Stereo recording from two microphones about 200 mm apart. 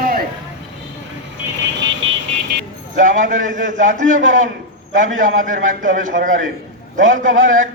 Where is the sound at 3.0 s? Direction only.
40° right (ahead or behind).